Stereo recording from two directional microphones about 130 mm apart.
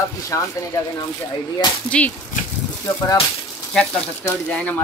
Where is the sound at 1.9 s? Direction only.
10° left (ahead or behind).